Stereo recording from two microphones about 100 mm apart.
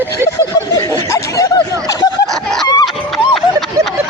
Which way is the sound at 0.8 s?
30° left (ahead or behind).